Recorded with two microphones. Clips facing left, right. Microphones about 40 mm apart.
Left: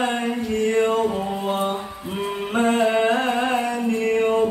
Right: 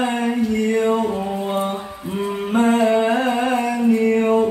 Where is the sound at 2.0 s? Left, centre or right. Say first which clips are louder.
Right 4 dB; centre.